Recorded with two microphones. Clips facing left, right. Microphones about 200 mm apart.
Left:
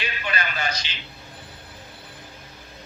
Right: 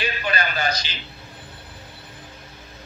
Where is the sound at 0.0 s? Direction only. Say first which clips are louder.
Right 4 dB; 40° right (ahead or behind).